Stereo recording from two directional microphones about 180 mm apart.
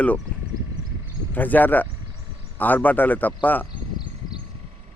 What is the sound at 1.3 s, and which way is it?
Speech, 10° left (ahead or behind).